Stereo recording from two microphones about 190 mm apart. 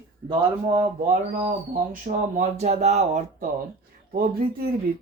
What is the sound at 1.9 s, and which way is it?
Speech, 40° right (ahead or behind).